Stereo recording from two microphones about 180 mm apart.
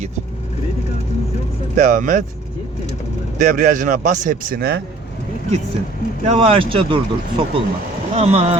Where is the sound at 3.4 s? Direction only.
45° right (ahead or behind).